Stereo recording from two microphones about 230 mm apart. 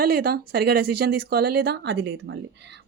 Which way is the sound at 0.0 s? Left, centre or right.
Right.